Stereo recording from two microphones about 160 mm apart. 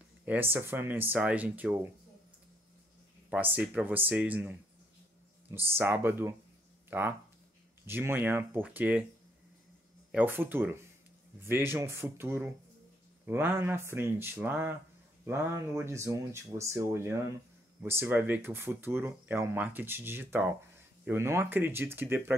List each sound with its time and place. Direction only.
0.2 s speech: 10° right (ahead or behind)
3.3 s speech: 10° right (ahead or behind)
10.1 s speech: 15° right (ahead or behind)